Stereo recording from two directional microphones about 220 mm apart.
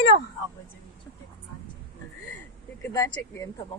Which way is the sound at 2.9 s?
15° left (ahead or behind).